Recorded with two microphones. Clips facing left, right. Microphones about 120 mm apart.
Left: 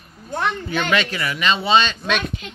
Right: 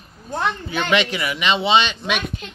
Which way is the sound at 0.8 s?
20° right (ahead or behind).